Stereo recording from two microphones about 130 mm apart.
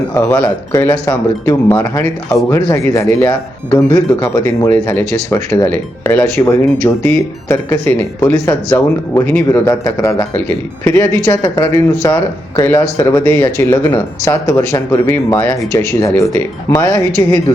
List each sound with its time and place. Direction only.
0.1 s speech: 20° left (ahead or behind)
11.3 s speech: 25° left (ahead or behind)